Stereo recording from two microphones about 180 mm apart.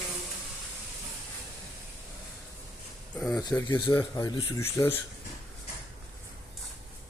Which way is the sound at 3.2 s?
5° left (ahead or behind).